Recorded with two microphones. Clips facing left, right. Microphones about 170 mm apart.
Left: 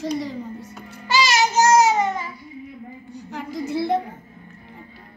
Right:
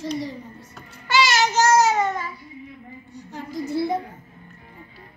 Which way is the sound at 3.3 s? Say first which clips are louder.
Left 1 dB; 90° left.